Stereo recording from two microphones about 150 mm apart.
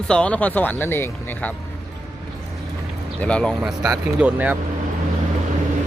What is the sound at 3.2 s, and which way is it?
Speech, 5° left (ahead or behind).